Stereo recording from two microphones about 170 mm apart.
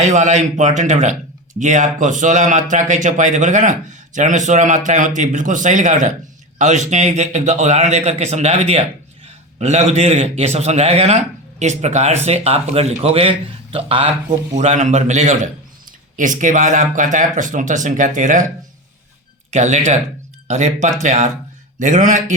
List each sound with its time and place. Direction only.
0.0 s a man's voice: 45° right (ahead or behind)
19.5 s speech: 45° right (ahead or behind)